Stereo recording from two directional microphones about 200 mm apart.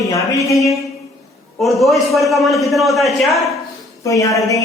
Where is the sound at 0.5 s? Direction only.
Centre (ahead or behind).